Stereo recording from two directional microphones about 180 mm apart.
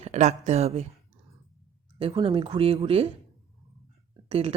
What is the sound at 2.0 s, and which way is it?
Speech, 30° right (ahead or behind).